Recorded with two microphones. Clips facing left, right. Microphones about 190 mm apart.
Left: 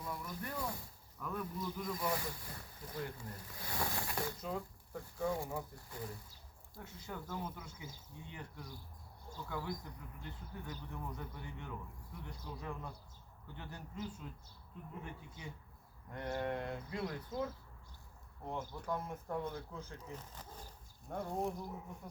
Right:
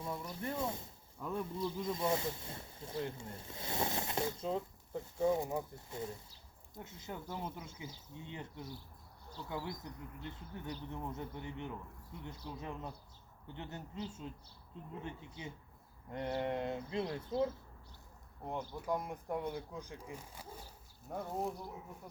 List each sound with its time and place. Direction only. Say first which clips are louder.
0.0 s speech: right 3 dB; 25° right (ahead or behind)
18.7 s speech: right 3 dB; 15° right (ahead or behind)